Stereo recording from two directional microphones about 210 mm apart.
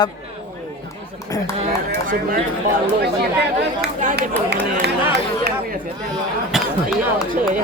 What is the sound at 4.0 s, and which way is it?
Chatter, 40° right (ahead or behind).